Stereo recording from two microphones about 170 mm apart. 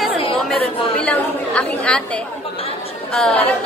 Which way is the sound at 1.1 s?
5° left (ahead or behind).